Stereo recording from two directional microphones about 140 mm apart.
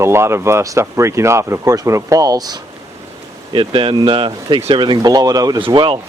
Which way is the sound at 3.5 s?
40° right (ahead or behind).